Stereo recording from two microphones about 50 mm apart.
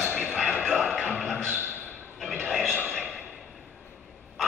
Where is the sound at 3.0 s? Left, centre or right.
Left.